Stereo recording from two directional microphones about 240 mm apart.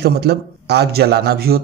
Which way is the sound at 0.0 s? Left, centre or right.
Right.